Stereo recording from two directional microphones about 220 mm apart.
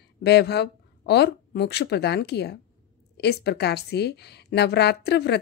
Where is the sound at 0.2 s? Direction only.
50° left (ahead or behind).